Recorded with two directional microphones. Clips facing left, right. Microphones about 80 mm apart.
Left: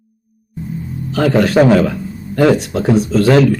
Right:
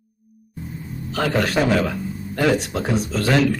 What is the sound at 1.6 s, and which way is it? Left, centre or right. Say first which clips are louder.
Speech: left 11 dB; left.